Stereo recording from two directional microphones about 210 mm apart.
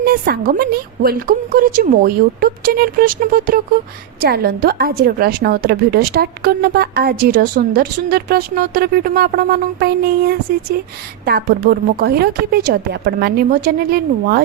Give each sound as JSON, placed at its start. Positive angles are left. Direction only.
{"t": 0.0, "sound": "a woman's voice", "side_deg": -45}